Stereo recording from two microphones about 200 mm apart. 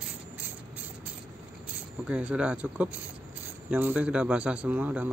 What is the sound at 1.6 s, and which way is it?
A man's voice, 5° right (ahead or behind).